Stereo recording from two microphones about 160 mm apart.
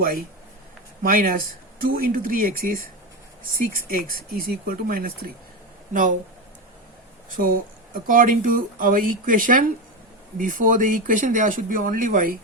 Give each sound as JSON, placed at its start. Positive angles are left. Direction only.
{"t": 1.0, "sound": "speech", "side_deg": -60}
{"t": 7.3, "sound": "speech", "side_deg": -60}